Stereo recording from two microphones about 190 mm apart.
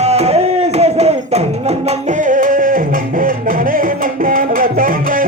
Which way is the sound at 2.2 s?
45° right (ahead or behind).